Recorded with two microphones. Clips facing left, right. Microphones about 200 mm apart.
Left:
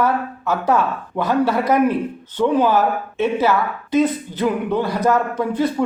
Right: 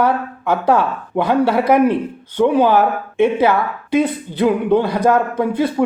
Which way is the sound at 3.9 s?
10° right (ahead or behind).